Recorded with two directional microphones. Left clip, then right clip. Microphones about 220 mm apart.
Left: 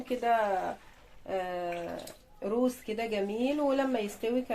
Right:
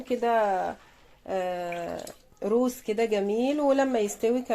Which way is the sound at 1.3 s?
40° right (ahead or behind).